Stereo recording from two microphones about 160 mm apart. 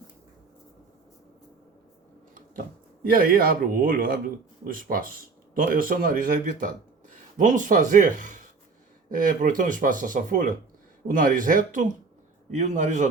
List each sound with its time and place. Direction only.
3.0 s speech: 65° right (ahead or behind)